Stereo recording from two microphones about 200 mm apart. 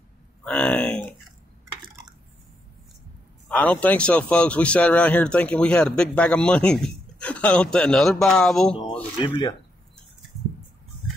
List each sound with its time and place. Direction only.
0.4 s a sound: 5° left (ahead or behind)
3.4 s speech: 5° left (ahead or behind)
9.2 s speech: 20° left (ahead or behind)